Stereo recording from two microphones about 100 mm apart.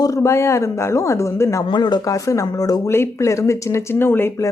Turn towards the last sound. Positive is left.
turn(degrees=20)  # may be behind; listen again after turning